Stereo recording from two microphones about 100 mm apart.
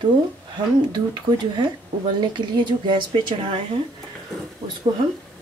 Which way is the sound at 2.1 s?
50° right (ahead or behind).